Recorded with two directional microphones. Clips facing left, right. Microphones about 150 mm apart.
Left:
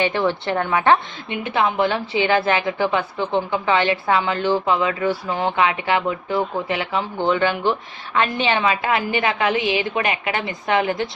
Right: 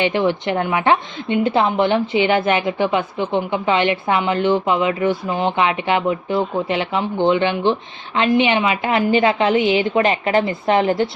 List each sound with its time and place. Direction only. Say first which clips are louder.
0.0 s a woman's voice: right 2 dB; 15° right (ahead or behind)
1.3 s a woman's voice: right 5 dB; 30° right (ahead or behind)